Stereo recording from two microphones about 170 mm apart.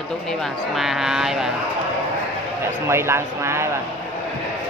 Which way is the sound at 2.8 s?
15° right (ahead or behind).